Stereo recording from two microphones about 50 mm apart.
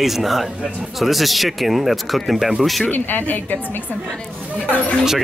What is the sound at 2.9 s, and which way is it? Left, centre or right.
Speech, left.